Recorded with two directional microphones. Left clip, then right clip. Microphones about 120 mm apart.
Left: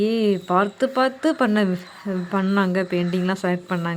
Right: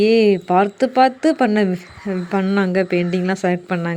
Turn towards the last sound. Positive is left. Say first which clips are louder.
# right 4 dB
turn(degrees=-20)  # may be behind; listen again after turning